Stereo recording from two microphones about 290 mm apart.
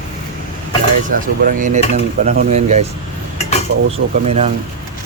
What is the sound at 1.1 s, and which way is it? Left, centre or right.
Speech, right.